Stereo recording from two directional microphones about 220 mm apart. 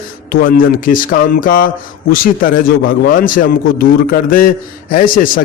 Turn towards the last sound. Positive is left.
turn(degrees=40)  # may be behind; listen again after turning